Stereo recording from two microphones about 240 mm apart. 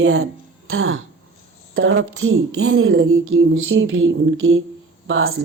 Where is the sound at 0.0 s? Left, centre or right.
Right.